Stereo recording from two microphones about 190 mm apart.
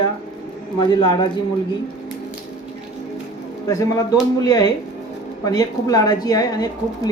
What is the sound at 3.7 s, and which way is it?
A woman's voice, 15° left (ahead or behind).